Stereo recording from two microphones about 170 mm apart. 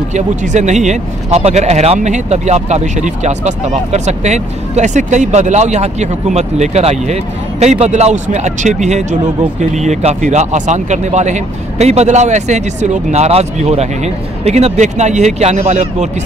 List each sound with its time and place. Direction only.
0.1 s speech: 45° right (ahead or behind)